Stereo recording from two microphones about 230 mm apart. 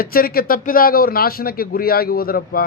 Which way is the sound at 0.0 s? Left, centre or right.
Left.